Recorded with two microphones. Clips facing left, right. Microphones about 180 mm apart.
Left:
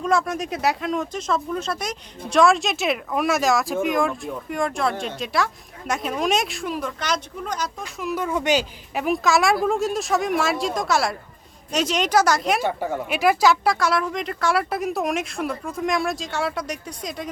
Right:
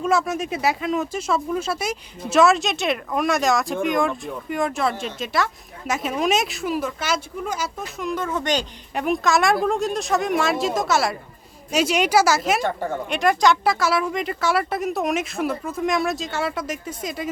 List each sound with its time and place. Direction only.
0.0 s a woman's voice: 5° right (ahead or behind)
12.6 s speech: 10° left (ahead or behind)